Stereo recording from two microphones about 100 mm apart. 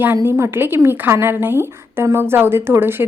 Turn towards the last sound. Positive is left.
turn(degrees=-20)  # may be behind; listen again after turning